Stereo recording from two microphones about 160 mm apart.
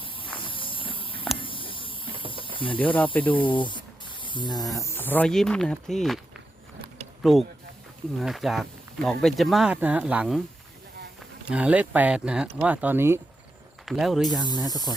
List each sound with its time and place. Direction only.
0.4 s walk: 30° left (ahead or behind)
0.9 s a sound: 35° left (ahead or behind)
2.1 s snake: 35° right (ahead or behind)
2.6 s speech: 30° left (ahead or behind)
2.8 s speech: 10° left (ahead or behind)
3.3 s spray: 30° left (ahead or behind)
4.7 s speech: 20° left (ahead or behind); by 6.1 s centre (ahead or behind)
7.2 s speech: centre (ahead or behind)
11.4 s speech: 10° right (ahead or behind)
13.8 s speech: centre (ahead or behind)